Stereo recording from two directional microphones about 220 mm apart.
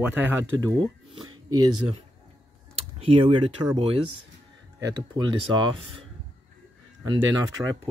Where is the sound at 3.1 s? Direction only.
25° right (ahead or behind).